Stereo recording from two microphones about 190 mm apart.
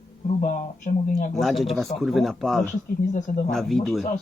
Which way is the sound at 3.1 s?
40° left (ahead or behind).